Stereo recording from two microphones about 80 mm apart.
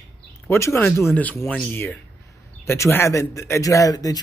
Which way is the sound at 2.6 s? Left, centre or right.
Left.